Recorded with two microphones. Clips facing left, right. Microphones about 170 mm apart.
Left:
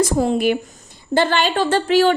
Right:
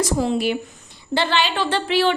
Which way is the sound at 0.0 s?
50° left (ahead or behind).